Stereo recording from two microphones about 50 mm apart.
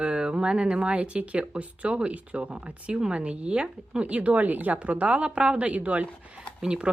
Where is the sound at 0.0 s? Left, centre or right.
Right.